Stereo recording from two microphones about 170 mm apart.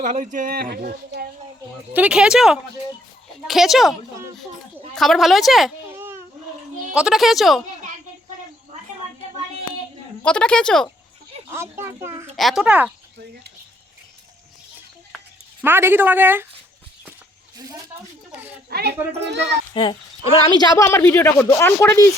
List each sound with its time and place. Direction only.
0.0 s speech: 50° right (ahead or behind); by 1.3 s 65° right (ahead or behind)
1.9 s a woman's voice: 5° right (ahead or behind)
4.9 s a woman's voice: centre (ahead or behind)
6.9 s a woman's voice: 5° right (ahead or behind)
10.2 s a woman's voice: 5° left (ahead or behind)
11.4 s speech: 15° right (ahead or behind)
12.4 s a woman's voice: centre (ahead or behind)
15.6 s speech: 10° right (ahead or behind)
17.6 s speech: 20° right (ahead or behind)
18.3 s a child's voice: 10° right (ahead or behind)
18.7 s speech: 70° right (ahead or behind)
19.7 s a child's voice: 30° left (ahead or behind)